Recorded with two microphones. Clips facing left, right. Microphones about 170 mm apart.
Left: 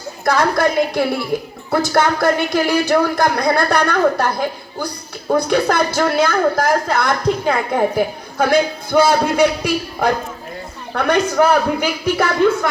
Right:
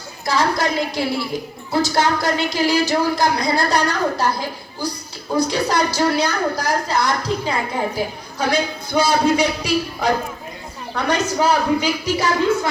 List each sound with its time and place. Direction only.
0.3 s speech: 55° left (ahead or behind)